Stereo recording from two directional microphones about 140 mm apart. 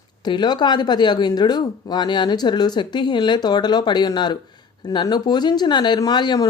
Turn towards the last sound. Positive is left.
turn(degrees=30)  # may be behind; listen again after turning